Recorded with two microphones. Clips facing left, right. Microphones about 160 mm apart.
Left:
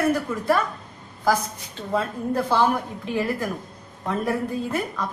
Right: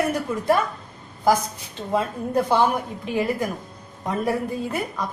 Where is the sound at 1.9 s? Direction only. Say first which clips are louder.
Right 1 dB; 15° right (ahead or behind).